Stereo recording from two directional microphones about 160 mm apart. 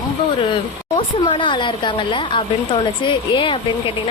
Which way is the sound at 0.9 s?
30° left (ahead or behind).